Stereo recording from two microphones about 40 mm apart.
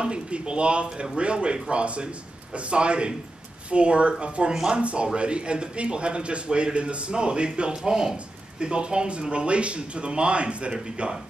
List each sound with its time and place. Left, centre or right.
0.0 s a man's voice: right